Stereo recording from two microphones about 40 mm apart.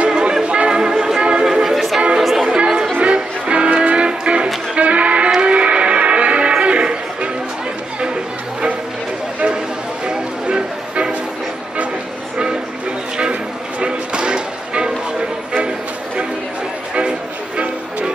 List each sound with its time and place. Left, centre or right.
0.0 s music: right
2.4 s chatter: right
3.0 s music: right
4.7 s sheep: right
5.4 s music: right
8.0 s chatter: right
10.0 s music: right
13.2 s a sound: right